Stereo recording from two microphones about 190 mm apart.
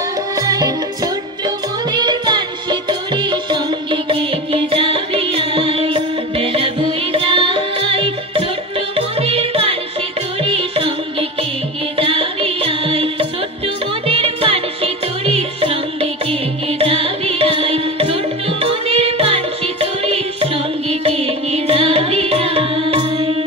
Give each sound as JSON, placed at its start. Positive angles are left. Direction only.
{"t": 0.4, "sound": "music", "side_deg": -20}